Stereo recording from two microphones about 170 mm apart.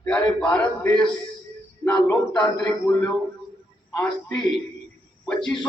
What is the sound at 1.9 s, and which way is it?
Speech, 20° left (ahead or behind).